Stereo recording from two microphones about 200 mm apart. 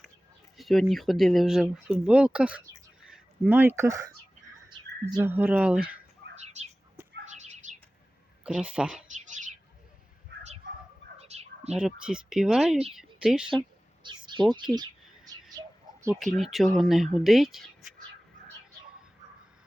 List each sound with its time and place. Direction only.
0.5 s speech: centre (ahead or behind)
5.2 s speech: 10° right (ahead or behind)
6.3 s bird: 35° right (ahead or behind)
8.4 s speech: 5° right (ahead or behind)
9.1 s a sound: 40° right (ahead or behind)
10.3 s a sound: 60° right (ahead or behind)
11.2 s bird: 30° right (ahead or behind)
11.7 s speech: 5° right (ahead or behind)
13.5 s a sound: 25° right (ahead or behind)
15.5 s bird: 15° right (ahead or behind)
16.2 s speech: centre (ahead or behind)